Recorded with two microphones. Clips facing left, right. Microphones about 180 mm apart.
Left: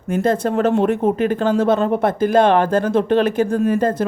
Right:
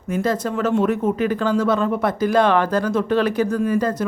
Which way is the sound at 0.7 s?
30° left (ahead or behind).